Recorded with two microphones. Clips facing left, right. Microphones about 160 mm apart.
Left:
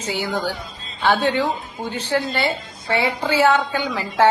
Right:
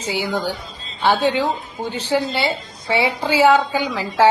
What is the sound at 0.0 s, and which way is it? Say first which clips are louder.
A woman's voice: right 1 dB; 20° right (ahead or behind).